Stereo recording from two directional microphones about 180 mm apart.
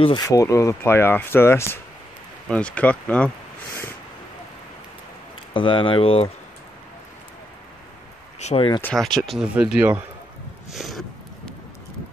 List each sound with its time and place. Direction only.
0.0 s speech: 20° left (ahead or behind); by 3.3 s 5° left (ahead or behind)
5.5 s speech: 30° left (ahead or behind)
8.4 s speech: 35° left (ahead or behind)
8.8 s speech: centre (ahead or behind)
10.7 s a sound: centre (ahead or behind)